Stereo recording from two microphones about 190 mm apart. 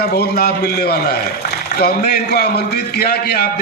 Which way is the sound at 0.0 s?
55° left (ahead or behind).